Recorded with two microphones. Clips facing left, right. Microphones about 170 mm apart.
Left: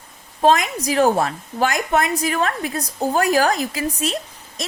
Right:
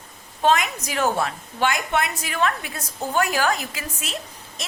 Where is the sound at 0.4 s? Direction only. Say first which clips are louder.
Left 4 dB; 35° left (ahead or behind).